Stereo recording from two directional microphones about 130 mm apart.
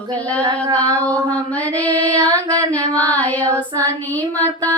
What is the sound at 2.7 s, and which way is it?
Female singing, 10° left (ahead or behind).